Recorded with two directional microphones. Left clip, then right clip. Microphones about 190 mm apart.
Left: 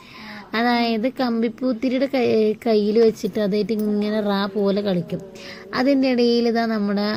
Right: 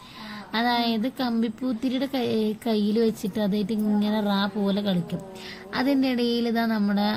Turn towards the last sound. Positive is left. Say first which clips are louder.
# left 3 dB
turn(degrees=20)  # may be behind; listen again after turning